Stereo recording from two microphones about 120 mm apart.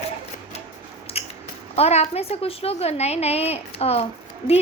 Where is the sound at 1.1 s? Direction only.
55° left (ahead or behind).